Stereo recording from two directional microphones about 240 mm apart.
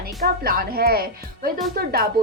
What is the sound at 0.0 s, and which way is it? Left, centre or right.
A woman's voice, right.